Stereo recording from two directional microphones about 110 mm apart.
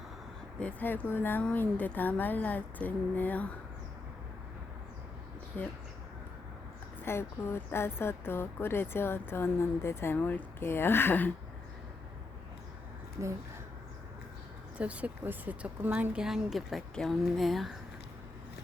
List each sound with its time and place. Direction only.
0.6 s speech: 15° left (ahead or behind)
5.5 s speech: 15° left (ahead or behind)
7.0 s a woman's voice: 20° left (ahead or behind)
14.8 s speech: 10° right (ahead or behind)